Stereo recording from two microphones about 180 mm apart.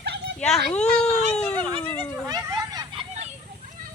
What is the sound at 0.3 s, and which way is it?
Speech, 5° left (ahead or behind).